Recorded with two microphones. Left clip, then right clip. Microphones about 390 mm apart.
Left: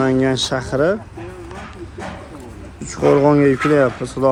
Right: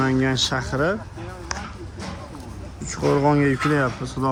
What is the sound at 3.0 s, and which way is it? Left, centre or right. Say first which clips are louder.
Speech: left 7 dB; left.